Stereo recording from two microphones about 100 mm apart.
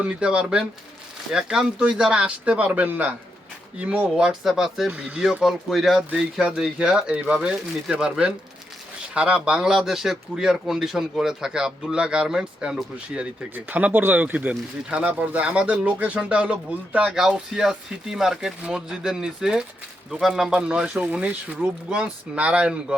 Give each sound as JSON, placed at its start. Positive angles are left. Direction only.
{"t": 0.0, "sound": "speech", "side_deg": -10}
{"t": 4.9, "sound": "speech", "side_deg": -15}